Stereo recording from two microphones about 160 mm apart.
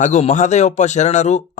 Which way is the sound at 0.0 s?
45° left (ahead or behind).